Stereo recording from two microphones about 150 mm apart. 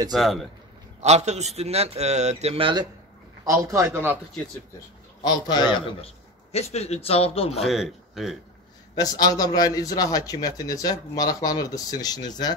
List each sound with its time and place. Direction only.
0.1 s a man's voice: centre (ahead or behind)
1.0 s a man's voice: 50° right (ahead or behind); by 2.9 s 30° right (ahead or behind)
3.4 s a man's voice: 20° right (ahead or behind)
5.2 s a man's voice: 30° left (ahead or behind)
5.9 s speech: 45° left (ahead or behind)
7.6 s a man's voice: centre (ahead or behind)
8.9 s a man's voice: 25° left (ahead or behind)